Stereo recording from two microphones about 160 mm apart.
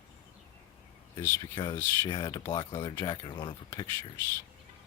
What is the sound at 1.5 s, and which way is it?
Speech, 30° left (ahead or behind).